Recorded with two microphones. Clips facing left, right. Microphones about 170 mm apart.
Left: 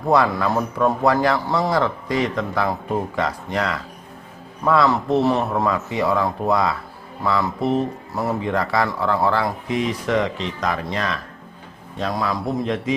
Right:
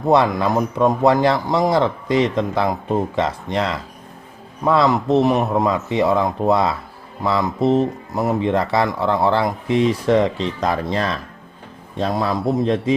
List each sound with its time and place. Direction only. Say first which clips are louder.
0.1 s a man's voice: right 2 dB; 20° right (ahead or behind)